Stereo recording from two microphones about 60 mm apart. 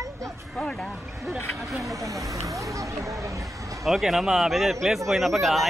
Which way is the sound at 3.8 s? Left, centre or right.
Centre.